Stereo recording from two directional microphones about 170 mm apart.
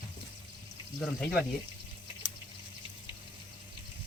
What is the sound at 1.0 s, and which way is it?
Speech, centre (ahead or behind).